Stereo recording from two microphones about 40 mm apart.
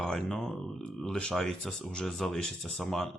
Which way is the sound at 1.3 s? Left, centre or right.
Centre.